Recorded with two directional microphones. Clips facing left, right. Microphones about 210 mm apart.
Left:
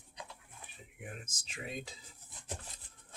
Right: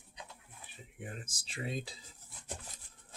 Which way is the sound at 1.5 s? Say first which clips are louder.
Right 4 dB; 35° right (ahead or behind).